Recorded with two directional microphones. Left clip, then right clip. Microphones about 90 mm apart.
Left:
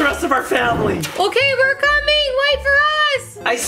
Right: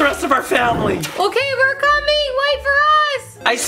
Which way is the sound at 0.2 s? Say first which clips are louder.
Right 1 dB; 30° right (ahead or behind).